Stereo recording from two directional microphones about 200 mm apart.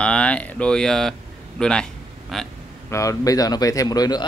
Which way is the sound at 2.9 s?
15° left (ahead or behind).